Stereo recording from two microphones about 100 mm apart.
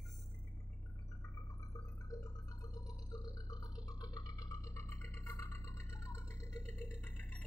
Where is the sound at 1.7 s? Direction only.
40° left (ahead or behind).